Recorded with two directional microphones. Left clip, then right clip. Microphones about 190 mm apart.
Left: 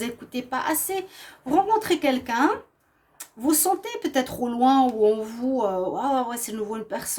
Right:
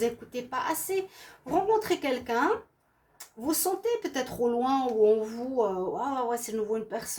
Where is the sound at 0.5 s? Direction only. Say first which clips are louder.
Left 4 dB; 55° left (ahead or behind).